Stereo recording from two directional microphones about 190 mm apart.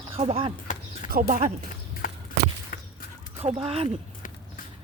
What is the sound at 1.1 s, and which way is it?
Speech, 45° right (ahead or behind).